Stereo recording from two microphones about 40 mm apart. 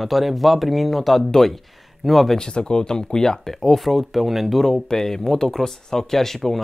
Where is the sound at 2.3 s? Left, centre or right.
Centre.